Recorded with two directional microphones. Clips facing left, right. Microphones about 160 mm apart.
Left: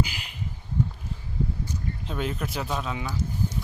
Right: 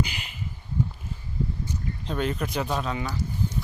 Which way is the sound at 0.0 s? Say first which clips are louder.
Left 1 dB; centre (ahead or behind).